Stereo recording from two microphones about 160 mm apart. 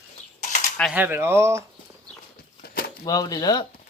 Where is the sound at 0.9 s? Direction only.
10° right (ahead or behind).